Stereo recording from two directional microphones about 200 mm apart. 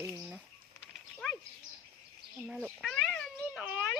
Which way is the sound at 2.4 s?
5° right (ahead or behind).